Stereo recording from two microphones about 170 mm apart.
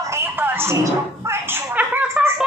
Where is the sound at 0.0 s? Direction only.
15° right (ahead or behind).